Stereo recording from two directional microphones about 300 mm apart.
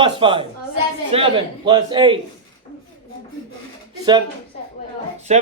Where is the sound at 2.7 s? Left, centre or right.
Centre.